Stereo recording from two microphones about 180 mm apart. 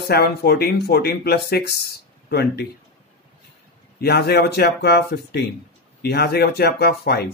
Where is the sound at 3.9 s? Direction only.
60° left (ahead or behind).